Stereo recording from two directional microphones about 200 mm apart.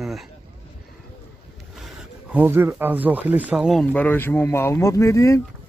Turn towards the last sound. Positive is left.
turn(degrees=15)  # may be behind; listen again after turning